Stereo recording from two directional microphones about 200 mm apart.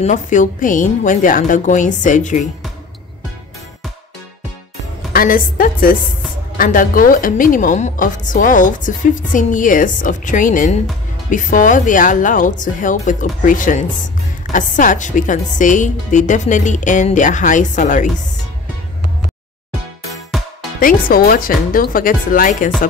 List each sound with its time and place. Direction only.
0.0 s a woman's voice: 40° left (ahead or behind)
5.1 s a woman's voice: 45° left (ahead or behind)
20.3 s music: centre (ahead or behind)
20.8 s speech: 45° left (ahead or behind)